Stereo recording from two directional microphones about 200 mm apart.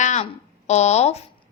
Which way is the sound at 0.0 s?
35° left (ahead or behind).